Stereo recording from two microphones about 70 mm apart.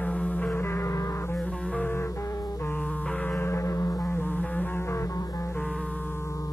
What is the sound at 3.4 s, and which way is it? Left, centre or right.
Music, left.